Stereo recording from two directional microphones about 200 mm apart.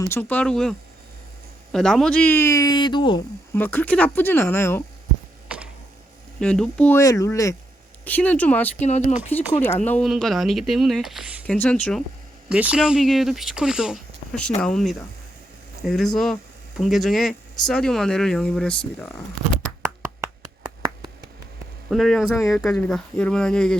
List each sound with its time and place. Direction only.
0.0 s speech: 10° left (ahead or behind)
3.5 s speech: 10° left (ahead or behind)
6.4 s speech: 5° left (ahead or behind)
11.4 s speech: 5° left (ahead or behind)
20.2 s a sound: 15° right (ahead or behind)
21.8 s speech: centre (ahead or behind)